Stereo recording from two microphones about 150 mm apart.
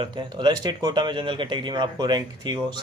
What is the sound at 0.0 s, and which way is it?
A man's voice, 30° right (ahead or behind).